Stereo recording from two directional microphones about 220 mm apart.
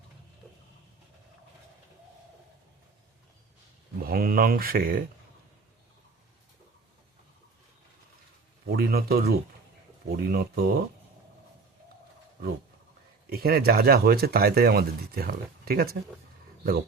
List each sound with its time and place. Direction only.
4.0 s speech: 40° right (ahead or behind)
8.7 s speech: 45° right (ahead or behind)
13.3 s speech: 45° right (ahead or behind)